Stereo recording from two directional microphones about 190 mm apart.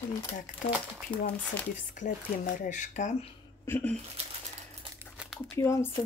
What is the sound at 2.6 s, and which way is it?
Speech, 40° left (ahead or behind).